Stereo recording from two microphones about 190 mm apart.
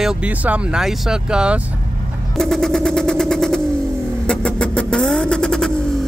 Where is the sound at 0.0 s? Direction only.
5° right (ahead or behind).